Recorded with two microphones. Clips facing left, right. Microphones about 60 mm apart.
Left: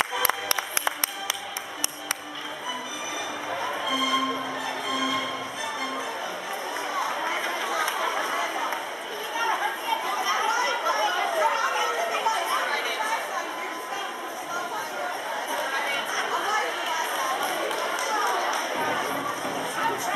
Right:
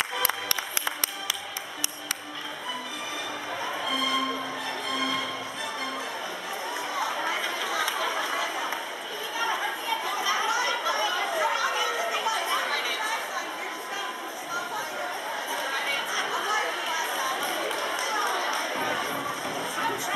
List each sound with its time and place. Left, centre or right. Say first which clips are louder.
3.9 s music: left 2 dB; centre
7.4 s a sound: left 2 dB; left
10.8 s chatter: left 3 dB; left
11.1 s chatter: left 3 dB; centre
11.5 s a sound: left 2 dB; left
12.4 s chatter: left 2 dB; centre
16.3 s chatter: left 2 dB; centre